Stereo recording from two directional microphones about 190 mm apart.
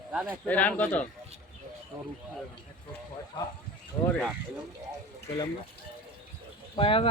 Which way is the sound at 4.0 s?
20° left (ahead or behind).